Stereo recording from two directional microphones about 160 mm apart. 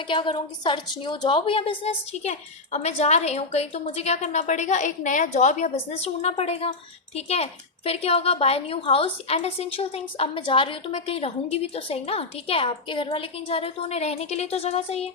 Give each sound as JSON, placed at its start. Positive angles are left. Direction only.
{"t": 0.1, "sound": "a woman's voice", "side_deg": 30}